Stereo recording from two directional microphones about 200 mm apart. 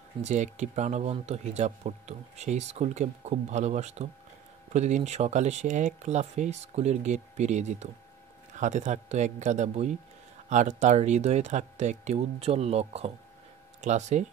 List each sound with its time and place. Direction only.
0.2 s speech: 35° right (ahead or behind)